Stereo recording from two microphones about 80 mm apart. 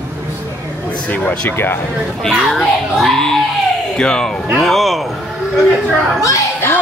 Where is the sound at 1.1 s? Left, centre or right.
Left.